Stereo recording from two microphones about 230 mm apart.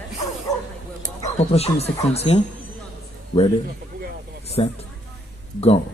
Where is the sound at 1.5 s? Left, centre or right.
Left.